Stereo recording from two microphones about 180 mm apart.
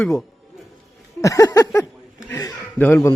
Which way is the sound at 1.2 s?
20° left (ahead or behind).